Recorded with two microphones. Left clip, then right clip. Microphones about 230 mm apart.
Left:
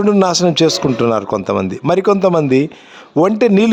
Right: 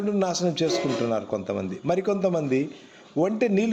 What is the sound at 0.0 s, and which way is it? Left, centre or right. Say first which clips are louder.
Speech: left 13 dB; left.